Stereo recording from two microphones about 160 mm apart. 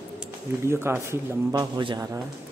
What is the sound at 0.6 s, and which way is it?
A man's voice, 15° right (ahead or behind).